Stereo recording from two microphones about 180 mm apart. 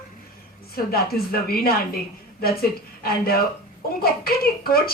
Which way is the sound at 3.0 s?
55° left (ahead or behind).